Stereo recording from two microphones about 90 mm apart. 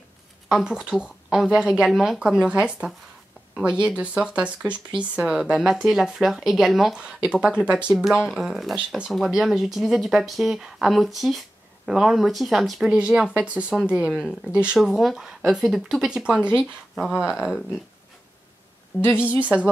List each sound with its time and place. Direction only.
0.5 s speech: 5° right (ahead or behind)
8.7 s speech: 10° right (ahead or behind)
18.9 s a woman's voice: 25° left (ahead or behind)